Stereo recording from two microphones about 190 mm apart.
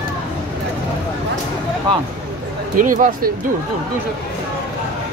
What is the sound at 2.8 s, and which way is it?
Speech, 45° right (ahead or behind).